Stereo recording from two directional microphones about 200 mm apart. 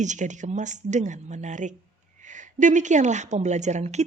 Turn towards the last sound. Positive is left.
turn(degrees=-35)  # may be behind; listen again after turning